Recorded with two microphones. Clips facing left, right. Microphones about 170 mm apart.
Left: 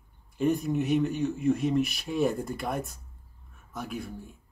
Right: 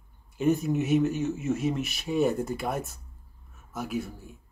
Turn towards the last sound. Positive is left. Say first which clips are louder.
# right 4 dB
turn(degrees=-5)  # may be behind; listen again after turning